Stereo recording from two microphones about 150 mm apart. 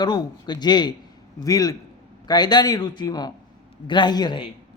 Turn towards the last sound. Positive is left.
turn(degrees=30)  # may be behind; listen again after turning